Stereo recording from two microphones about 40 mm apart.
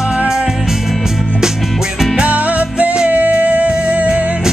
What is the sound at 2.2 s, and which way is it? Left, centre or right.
Music, right.